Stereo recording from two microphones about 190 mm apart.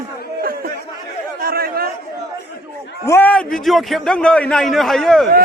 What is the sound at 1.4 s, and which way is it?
Chatter, 55° right (ahead or behind).